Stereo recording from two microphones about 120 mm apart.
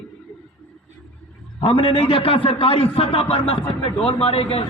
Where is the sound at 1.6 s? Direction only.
45° left (ahead or behind).